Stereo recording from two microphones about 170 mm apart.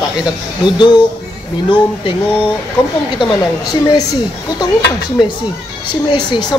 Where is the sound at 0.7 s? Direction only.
25° left (ahead or behind).